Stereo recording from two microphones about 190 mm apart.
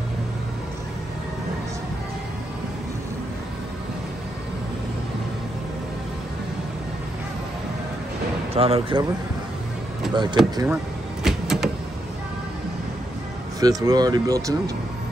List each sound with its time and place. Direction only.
8.5 s speech: 30° right (ahead or behind)
10.1 s speech: 25° right (ahead or behind)
11.2 s a sound: centre (ahead or behind)
13.6 s speech: 20° right (ahead or behind)